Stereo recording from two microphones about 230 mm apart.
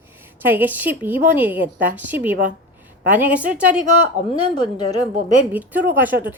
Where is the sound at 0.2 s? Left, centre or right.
Centre.